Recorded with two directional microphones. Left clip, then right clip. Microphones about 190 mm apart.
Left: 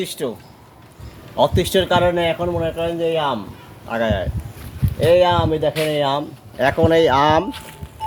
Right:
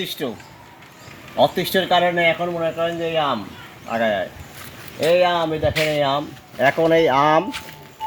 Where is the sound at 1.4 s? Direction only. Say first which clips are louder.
Left 1 dB; 25° left (ahead or behind).